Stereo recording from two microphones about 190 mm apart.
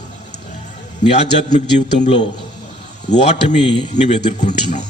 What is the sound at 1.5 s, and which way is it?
Speech, 40° left (ahead or behind).